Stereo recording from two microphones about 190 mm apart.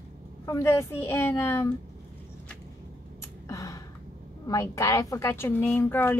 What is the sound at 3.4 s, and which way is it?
Gasp, 15° left (ahead or behind).